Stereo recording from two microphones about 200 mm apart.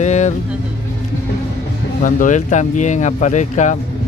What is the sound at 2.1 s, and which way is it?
Speech, 40° left (ahead or behind).